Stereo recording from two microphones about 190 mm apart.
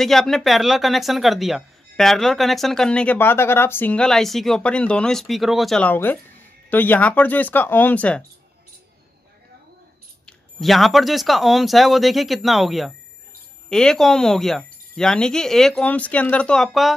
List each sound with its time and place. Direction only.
0.0 s speech: centre (ahead or behind)
10.2 s speech: centre (ahead or behind)